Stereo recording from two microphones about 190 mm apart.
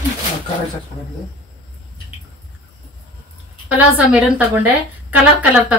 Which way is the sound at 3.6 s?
5° right (ahead or behind).